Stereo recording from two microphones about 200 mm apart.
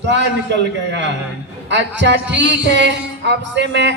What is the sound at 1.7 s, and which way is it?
A man's voice, 60° right (ahead or behind).